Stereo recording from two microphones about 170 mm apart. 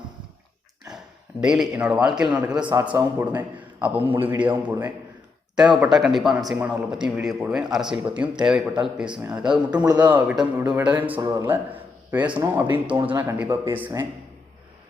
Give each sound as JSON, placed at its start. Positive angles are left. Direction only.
{"t": 1.4, "sound": "a man's voice", "side_deg": -5}
{"t": 9.8, "sound": "a man's voice", "side_deg": -25}
{"t": 10.1, "sound": "a man's voice", "side_deg": -10}